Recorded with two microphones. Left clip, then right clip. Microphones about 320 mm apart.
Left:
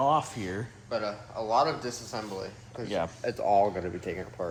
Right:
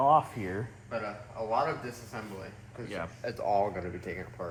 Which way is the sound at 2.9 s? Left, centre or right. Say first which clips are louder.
Left 7 dB; centre.